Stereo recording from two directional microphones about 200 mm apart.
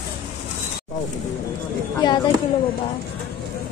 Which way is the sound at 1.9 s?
20° left (ahead or behind).